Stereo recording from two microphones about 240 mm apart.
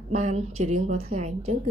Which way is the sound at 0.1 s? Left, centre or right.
Right.